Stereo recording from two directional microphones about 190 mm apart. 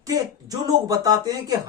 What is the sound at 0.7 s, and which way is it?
Speech, 20° right (ahead or behind).